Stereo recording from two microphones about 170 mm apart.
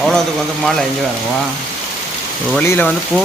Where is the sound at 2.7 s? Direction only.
10° left (ahead or behind).